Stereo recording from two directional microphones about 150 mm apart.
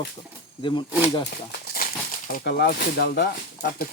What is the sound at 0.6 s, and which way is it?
Speech, 30° left (ahead or behind).